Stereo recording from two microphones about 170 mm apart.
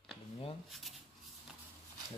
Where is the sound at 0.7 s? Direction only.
Centre (ahead or behind).